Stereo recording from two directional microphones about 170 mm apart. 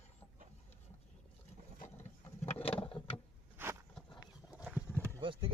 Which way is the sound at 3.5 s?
15° right (ahead or behind).